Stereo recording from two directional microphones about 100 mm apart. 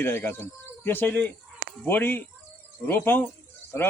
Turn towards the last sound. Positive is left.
turn(degrees=25)  # may be behind; listen again after turning